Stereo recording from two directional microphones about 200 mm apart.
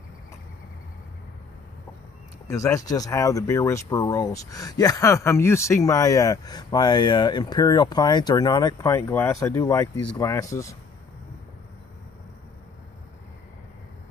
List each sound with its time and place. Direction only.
2.4 s speech: 15° left (ahead or behind)